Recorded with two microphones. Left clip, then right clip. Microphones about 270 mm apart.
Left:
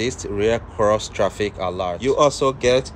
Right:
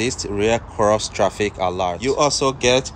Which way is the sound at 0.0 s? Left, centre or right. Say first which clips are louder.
Right 1 dB; centre.